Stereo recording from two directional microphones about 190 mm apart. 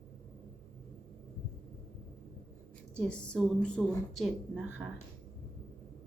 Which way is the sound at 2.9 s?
5° left (ahead or behind).